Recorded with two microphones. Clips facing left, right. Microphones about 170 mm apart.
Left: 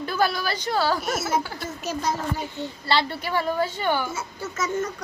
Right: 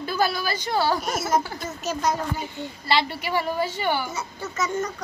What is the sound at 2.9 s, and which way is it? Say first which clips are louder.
A child's voice: right 1 dB; 10° right (ahead or behind).